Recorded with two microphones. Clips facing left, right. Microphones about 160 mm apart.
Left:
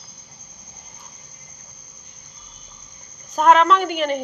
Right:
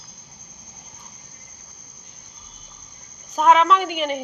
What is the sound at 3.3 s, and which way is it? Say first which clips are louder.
Speech: left 1 dB; centre (ahead or behind).